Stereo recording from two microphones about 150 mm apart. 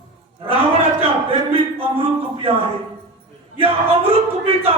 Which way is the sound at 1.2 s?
40° right (ahead or behind).